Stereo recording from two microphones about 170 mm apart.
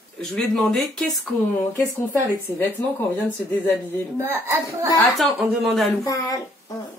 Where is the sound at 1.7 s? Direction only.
15° left (ahead or behind).